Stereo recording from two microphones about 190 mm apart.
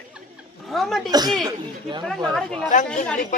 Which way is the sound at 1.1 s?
20° right (ahead or behind).